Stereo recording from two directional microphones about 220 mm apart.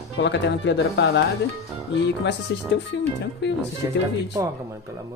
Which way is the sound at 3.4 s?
50° left (ahead or behind).